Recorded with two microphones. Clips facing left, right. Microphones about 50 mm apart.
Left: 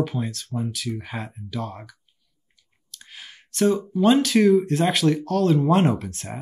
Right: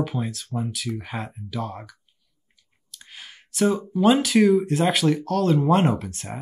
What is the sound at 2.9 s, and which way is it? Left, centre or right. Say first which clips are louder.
Speech: even; centre.